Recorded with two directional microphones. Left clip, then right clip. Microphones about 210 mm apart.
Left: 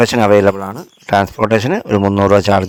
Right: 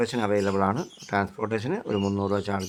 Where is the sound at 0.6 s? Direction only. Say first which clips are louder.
Even; centre (ahead or behind).